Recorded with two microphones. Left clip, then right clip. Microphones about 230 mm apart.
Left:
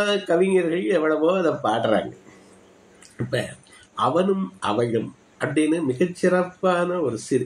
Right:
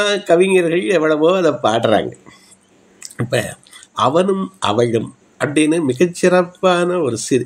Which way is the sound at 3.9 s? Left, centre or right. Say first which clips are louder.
Right 6 dB; right.